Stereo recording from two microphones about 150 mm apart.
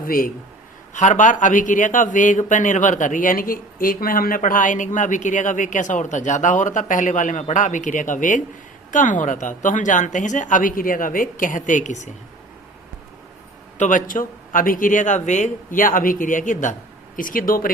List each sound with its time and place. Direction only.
0.0 s a man's voice: 70° left (ahead or behind)
0.9 s speech: 55° left (ahead or behind)
13.7 s speech: 60° left (ahead or behind)